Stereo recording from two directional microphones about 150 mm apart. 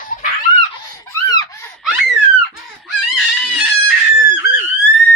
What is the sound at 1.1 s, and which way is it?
Laughter, 20° left (ahead or behind).